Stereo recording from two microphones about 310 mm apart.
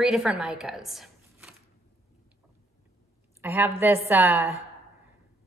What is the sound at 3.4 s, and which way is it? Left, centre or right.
A woman's voice, centre.